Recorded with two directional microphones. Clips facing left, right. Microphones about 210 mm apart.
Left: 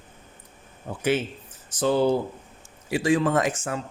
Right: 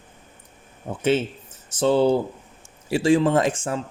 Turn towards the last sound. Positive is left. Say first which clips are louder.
# right 3 dB
turn(degrees=-30)  # may be behind; listen again after turning